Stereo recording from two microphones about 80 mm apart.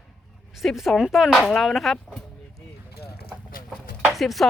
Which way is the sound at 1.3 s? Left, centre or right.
Centre.